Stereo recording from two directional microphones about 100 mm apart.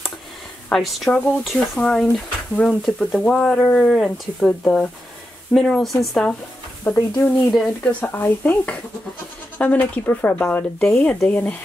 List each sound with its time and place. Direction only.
0.7 s speech: centre (ahead or behind)
6.8 s speech: 25° left (ahead or behind)
7.5 s speech: 5° left (ahead or behind)
8.0 s speech: 20° left (ahead or behind)